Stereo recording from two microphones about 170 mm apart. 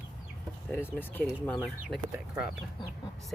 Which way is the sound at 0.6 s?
10° left (ahead or behind).